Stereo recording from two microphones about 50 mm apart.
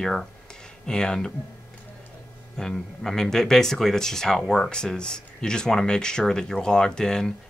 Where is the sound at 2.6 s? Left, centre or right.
Centre.